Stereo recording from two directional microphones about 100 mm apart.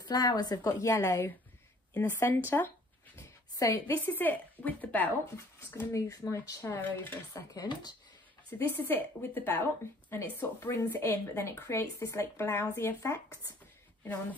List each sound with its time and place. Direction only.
0.0 s a woman's voice: 40° left (ahead or behind)
2.0 s a woman's voice: 20° left (ahead or behind)
3.2 s a sound: 35° left (ahead or behind)
4.0 s a woman's voice: 20° left (ahead or behind)
7.5 s speech: 45° left (ahead or behind)
8.5 s a woman's voice: 25° left (ahead or behind)